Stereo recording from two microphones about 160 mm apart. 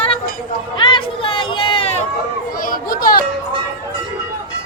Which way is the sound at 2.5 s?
60° left (ahead or behind).